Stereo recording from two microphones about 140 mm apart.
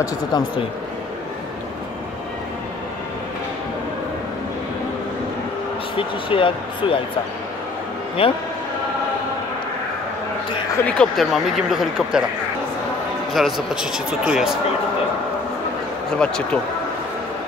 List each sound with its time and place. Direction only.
0.0 s speech: 30° left (ahead or behind)
5.9 s speech: 40° left (ahead or behind)
8.2 s speech: 40° left (ahead or behind)
11.0 s speech: centre (ahead or behind)
13.3 s speech: centre (ahead or behind)
16.2 s speech: 5° left (ahead or behind)